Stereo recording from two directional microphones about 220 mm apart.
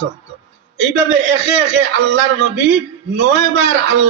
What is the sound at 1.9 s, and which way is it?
A man's voice, 60° right (ahead or behind).